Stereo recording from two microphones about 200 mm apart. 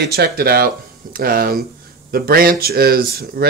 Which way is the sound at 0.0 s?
55° right (ahead or behind).